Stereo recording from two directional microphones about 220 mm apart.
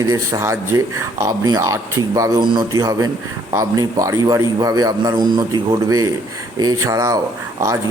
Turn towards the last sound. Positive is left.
turn(degrees=-15)  # may be behind; listen again after turning